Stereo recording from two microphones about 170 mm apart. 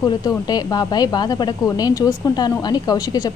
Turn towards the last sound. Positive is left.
turn(degrees=20)  # may be behind; listen again after turning